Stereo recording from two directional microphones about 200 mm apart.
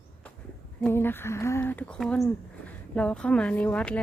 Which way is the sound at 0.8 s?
10° left (ahead or behind).